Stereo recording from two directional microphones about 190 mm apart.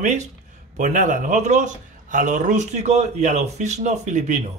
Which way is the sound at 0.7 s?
40° right (ahead or behind).